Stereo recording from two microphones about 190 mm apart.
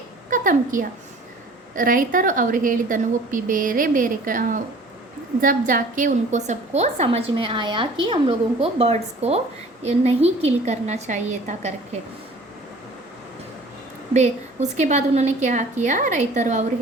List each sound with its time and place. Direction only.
0.3 s a woman's voice: 45° right (ahead or behind)
14.1 s a woman's voice: 35° right (ahead or behind)